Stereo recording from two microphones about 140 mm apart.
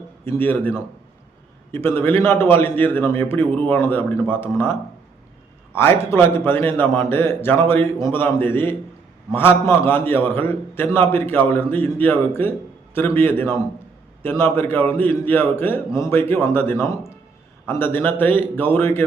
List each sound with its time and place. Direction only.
0.3 s a man's voice: 15° left (ahead or behind)
1.7 s a man's voice: 15° left (ahead or behind)